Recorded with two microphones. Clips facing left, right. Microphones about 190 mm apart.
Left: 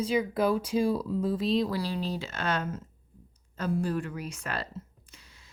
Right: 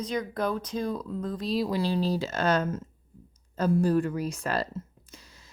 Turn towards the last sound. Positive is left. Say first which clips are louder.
# right 5 dB
turn(degrees=-40)  # may be behind; listen again after turning